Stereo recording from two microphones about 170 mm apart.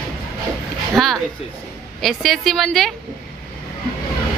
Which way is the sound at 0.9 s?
Centre (ahead or behind).